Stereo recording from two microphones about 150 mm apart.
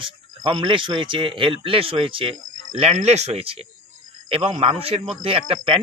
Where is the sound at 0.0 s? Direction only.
35° right (ahead or behind).